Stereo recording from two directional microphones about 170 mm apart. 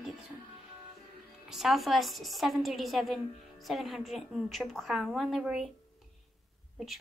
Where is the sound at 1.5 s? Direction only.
Centre (ahead or behind).